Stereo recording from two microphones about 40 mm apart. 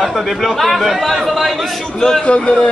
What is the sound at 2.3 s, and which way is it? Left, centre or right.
Speech, left.